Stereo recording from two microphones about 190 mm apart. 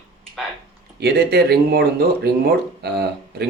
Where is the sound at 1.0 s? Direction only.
60° right (ahead or behind).